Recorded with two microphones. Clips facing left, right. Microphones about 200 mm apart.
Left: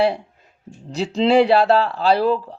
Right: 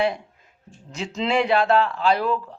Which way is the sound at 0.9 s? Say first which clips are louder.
Left 8 dB; 35° left (ahead or behind).